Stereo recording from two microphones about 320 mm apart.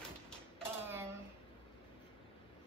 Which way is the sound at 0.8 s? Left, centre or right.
Centre.